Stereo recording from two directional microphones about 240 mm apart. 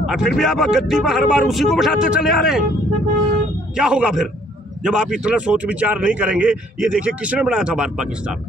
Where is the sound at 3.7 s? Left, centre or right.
Centre.